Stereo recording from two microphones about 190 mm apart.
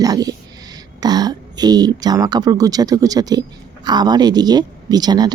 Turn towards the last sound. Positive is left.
turn(degrees=-20)  # may be behind; listen again after turning